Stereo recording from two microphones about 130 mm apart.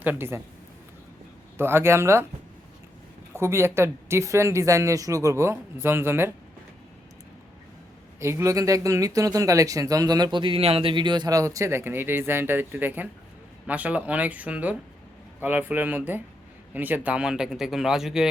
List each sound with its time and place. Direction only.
0.0 s speech: 15° right (ahead or behind)
1.5 s speech: 20° right (ahead or behind)
3.3 s speech: 20° right (ahead or behind)
8.2 s speech: 20° right (ahead or behind); by 18.3 s 5° right (ahead or behind)